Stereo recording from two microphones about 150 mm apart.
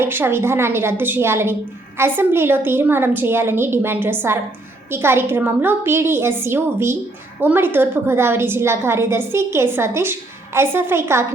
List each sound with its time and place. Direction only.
0.0 s a woman's voice: 15° right (ahead or behind)